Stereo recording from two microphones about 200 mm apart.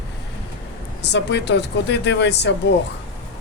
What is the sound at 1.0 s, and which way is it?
A man's voice, 60° left (ahead or behind).